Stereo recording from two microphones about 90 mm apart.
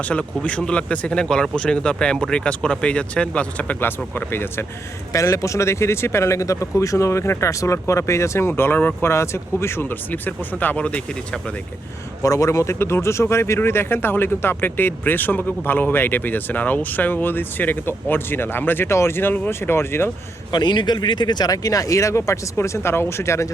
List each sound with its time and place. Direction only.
0.0 s speech: 15° left (ahead or behind)
12.2 s speech: 35° left (ahead or behind)
20.5 s speech: 55° left (ahead or behind); by 23.5 s 30° left (ahead or behind)